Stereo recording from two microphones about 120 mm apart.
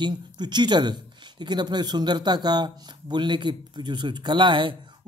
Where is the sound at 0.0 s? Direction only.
40° right (ahead or behind).